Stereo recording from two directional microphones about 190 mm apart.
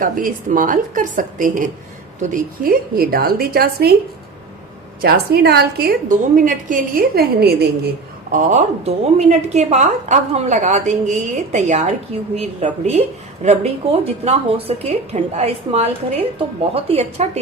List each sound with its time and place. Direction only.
0.0 s a woman's voice: 45° right (ahead or behind)
4.9 s a woman's voice: 55° right (ahead or behind)
8.3 s a woman's voice: 40° right (ahead or behind)